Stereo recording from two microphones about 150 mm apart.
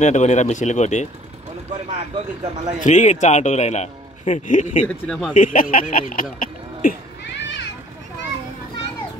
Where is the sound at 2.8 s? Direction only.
55° left (ahead or behind).